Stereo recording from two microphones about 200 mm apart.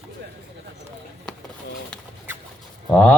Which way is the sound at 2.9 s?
10° left (ahead or behind).